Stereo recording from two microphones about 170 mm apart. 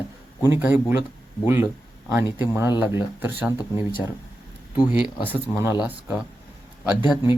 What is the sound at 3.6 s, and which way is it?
Speech, 25° left (ahead or behind).